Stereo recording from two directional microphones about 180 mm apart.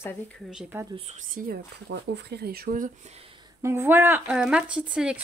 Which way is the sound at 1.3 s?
50° right (ahead or behind).